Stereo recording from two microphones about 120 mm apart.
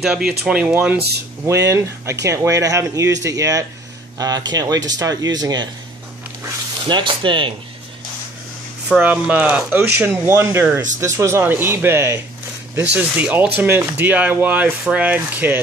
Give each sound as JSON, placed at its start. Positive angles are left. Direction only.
{"t": 0.0, "sound": "speech", "side_deg": -5}
{"t": 1.4, "sound": "speech", "side_deg": -25}
{"t": 6.9, "sound": "speech", "side_deg": -40}
{"t": 8.8, "sound": "speech", "side_deg": -10}
{"t": 12.9, "sound": "speech", "side_deg": -10}